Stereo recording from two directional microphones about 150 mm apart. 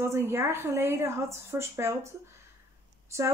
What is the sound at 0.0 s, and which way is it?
A woman's voice, 15° right (ahead or behind).